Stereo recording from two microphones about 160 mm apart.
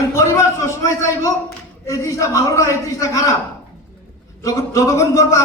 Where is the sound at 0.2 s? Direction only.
20° left (ahead or behind).